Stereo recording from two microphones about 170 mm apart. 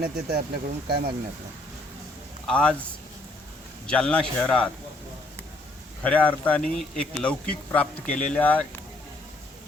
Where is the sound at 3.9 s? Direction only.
5° left (ahead or behind).